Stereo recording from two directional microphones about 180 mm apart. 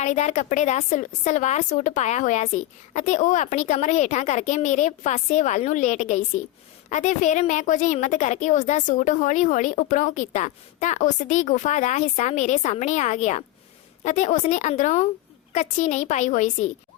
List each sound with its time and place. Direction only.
0.0 s a woman's voice: 40° left (ahead or behind)